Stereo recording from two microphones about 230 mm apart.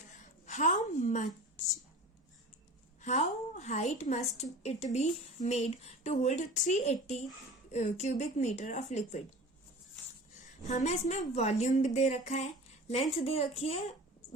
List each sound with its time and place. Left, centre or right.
0.4 s a sound: left
3.0 s a woman's voice: left
10.7 s a woman's voice: left